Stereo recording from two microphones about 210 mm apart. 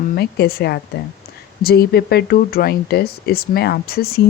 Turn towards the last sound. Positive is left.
turn(degrees=45)  # may be behind; listen again after turning